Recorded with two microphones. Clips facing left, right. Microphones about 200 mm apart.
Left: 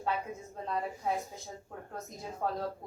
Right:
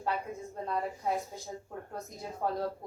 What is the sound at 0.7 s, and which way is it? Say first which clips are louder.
Speech: right 1 dB; centre (ahead or behind).